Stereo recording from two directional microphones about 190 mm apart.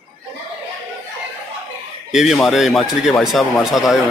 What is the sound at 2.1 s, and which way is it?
Speech, centre (ahead or behind).